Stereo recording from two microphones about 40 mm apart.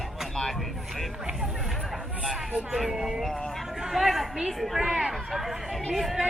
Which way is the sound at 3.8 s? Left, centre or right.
Centre.